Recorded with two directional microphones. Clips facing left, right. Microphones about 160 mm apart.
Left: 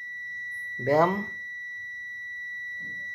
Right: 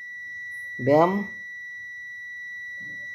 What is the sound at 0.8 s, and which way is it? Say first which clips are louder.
Speech: right 4 dB; 15° right (ahead or behind).